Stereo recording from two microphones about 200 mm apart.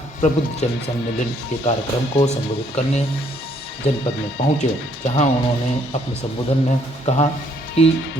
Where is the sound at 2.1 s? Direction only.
30° left (ahead or behind).